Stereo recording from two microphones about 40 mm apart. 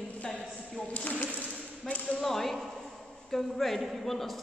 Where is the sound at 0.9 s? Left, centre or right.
Left.